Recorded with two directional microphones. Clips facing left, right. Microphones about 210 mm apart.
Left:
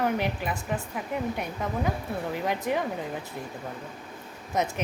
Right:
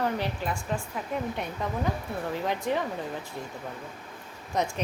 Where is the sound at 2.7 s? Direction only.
10° left (ahead or behind).